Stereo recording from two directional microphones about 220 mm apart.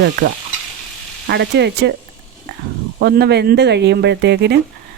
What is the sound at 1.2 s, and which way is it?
Speech, 50° right (ahead or behind).